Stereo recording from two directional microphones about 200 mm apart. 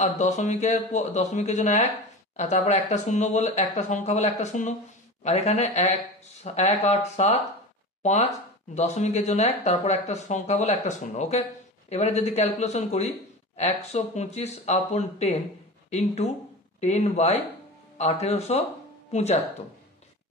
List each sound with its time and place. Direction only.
0.0 s speech: 35° left (ahead or behind)